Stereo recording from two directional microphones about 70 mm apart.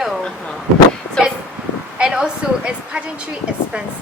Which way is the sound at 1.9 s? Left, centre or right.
Centre.